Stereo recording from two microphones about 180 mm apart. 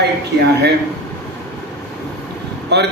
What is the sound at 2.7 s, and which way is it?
Speech, 70° right (ahead or behind).